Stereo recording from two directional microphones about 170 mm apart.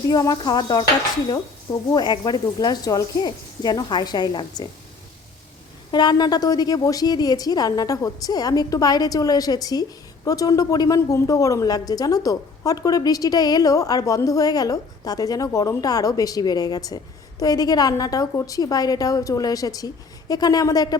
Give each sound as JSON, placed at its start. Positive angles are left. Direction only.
{"t": 0.1, "sound": "a woman's voice", "side_deg": 25}
{"t": 1.9, "sound": "a woman's voice", "side_deg": 25}
{"t": 5.9, "sound": "a woman's voice", "side_deg": 25}